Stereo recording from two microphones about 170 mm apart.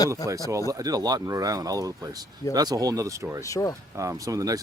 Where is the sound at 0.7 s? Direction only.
20° right (ahead or behind).